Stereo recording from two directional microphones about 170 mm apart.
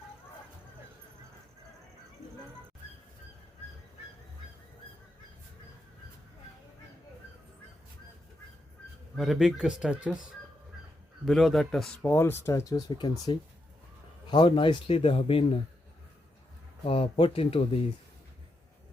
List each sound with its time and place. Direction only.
9.1 s speech: centre (ahead or behind)
11.3 s speech: centre (ahead or behind)
12.1 s speech: 15° left (ahead or behind); by 15.5 s 35° left (ahead or behind)
16.8 s speech: 35° left (ahead or behind)